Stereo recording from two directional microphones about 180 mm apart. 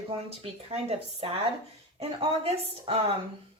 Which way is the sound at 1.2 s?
35° right (ahead or behind).